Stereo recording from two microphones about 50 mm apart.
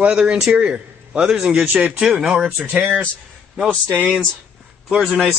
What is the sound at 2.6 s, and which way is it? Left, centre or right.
Speech, right.